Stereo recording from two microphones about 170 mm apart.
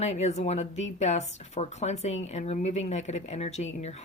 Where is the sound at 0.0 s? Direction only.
40° left (ahead or behind).